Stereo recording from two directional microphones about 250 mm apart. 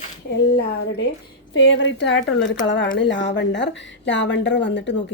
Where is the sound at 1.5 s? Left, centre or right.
Left.